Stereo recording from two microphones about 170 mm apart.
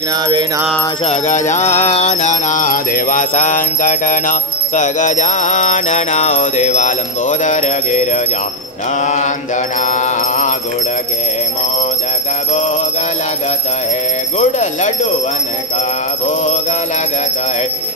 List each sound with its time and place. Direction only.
1.0 s music: 45° left (ahead or behind)
9.8 s mantra: 45° left (ahead or behind)
14.4 s bell: 45° left (ahead or behind)